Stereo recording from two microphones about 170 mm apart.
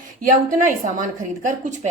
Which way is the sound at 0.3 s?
50° right (ahead or behind).